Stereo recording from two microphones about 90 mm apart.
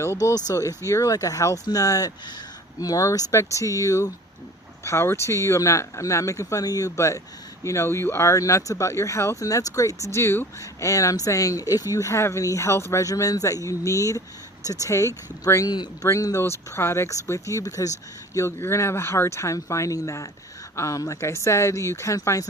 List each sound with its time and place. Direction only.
0.0 s speech: 35° left (ahead or behind)
18.3 s speech: 30° left (ahead or behind)